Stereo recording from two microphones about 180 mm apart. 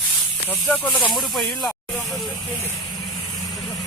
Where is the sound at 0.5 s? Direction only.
10° left (ahead or behind).